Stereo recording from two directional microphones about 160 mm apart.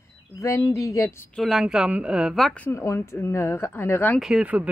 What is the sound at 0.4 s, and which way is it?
Speech, 20° left (ahead or behind).